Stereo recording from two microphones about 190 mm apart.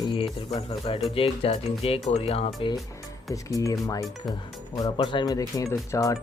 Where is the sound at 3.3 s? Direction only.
15° left (ahead or behind).